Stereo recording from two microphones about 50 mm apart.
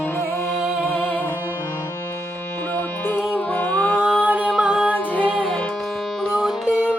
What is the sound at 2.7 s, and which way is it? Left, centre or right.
Music, left.